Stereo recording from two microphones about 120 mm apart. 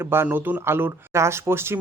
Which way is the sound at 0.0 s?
20° right (ahead or behind).